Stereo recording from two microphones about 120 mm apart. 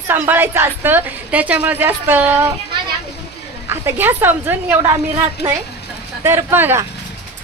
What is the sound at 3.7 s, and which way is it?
A woman's voice, 20° right (ahead or behind).